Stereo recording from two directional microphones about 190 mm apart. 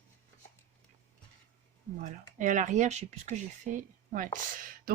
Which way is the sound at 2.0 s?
40° right (ahead or behind).